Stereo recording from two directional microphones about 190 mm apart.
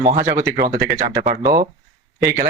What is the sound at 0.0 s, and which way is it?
Speech, 45° right (ahead or behind).